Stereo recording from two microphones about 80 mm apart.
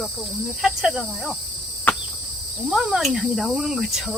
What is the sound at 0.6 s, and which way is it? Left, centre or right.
Insect, centre.